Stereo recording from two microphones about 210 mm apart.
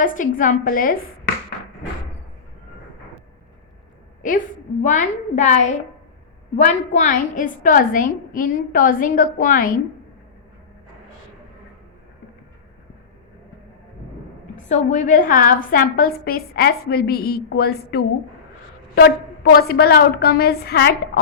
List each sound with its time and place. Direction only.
0.0 s a woman's voice: 40° left (ahead or behind)
4.2 s a woman's voice: 40° left (ahead or behind)
14.5 s a woman's voice: 35° left (ahead or behind); by 20.9 s 50° left (ahead or behind)